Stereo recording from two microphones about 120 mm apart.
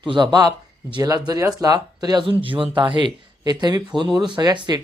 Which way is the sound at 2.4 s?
45° right (ahead or behind).